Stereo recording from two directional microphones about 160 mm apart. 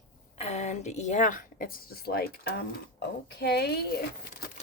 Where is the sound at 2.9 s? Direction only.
90° left.